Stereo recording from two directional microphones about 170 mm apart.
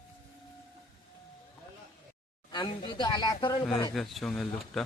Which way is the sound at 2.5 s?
25° left (ahead or behind).